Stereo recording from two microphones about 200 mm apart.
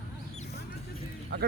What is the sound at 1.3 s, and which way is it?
Speech, 60° right (ahead or behind).